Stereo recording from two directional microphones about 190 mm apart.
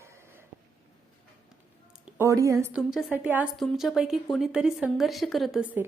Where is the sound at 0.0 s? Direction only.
15° right (ahead or behind).